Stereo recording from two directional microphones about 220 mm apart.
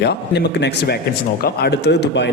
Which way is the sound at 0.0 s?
50° left (ahead or behind).